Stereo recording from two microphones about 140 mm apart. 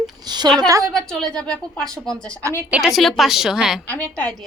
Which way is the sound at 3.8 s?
10° left (ahead or behind).